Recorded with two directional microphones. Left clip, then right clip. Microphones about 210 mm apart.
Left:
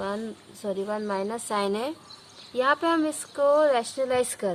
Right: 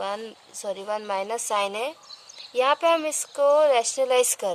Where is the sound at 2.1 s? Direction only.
50° right (ahead or behind).